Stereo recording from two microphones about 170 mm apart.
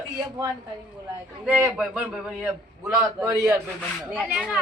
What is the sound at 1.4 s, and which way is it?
A man's voice, 10° right (ahead or behind).